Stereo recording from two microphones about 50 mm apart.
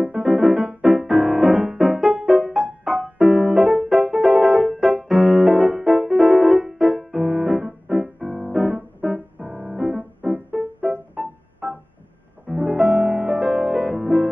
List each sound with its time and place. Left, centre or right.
0.2 s music: centre
8.5 s keyboard: centre
10.5 s music: centre
12.7 s music: centre